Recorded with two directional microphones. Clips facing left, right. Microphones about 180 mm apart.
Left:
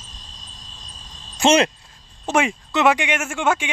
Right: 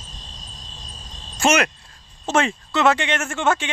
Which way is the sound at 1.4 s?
20° left (ahead or behind).